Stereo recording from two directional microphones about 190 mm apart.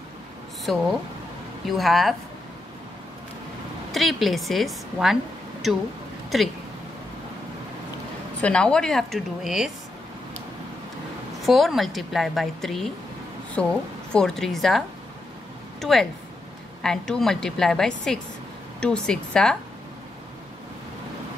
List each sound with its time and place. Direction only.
0.7 s a woman's voice: centre (ahead or behind)
3.9 s a woman's voice: centre (ahead or behind)
8.4 s a woman's voice: 5° left (ahead or behind)
11.4 s a woman's voice: centre (ahead or behind)